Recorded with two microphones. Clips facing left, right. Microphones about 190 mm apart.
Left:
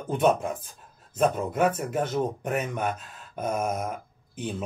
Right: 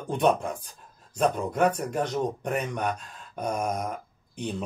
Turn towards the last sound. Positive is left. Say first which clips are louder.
# even
turn(degrees=5)  # may be behind; listen again after turning